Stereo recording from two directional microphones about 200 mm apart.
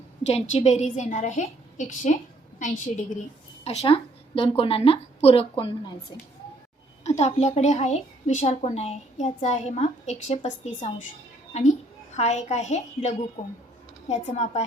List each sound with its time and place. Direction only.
0.2 s a woman's voice: 30° left (ahead or behind)
7.0 s a woman's voice: 35° left (ahead or behind)
12.1 s a woman's voice: 35° left (ahead or behind)